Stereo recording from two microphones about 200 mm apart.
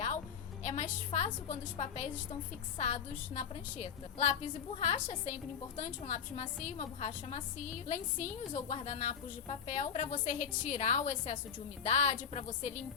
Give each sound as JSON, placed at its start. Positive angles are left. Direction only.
{"t": 0.6, "sound": "a woman's voice", "side_deg": 35}